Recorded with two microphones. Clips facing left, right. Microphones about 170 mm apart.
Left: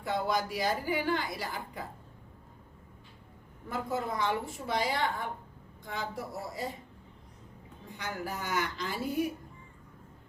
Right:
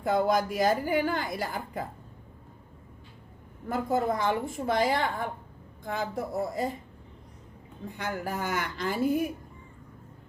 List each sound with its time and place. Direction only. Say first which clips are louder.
0.0 s a woman's voice: right 6 dB; 50° right (ahead or behind)
3.7 s a woman's voice: right 6 dB; 50° right (ahead or behind)
7.9 s a woman's voice: right 4 dB; 50° right (ahead or behind)